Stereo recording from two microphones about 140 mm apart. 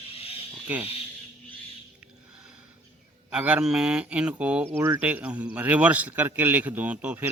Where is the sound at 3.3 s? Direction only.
10° right (ahead or behind).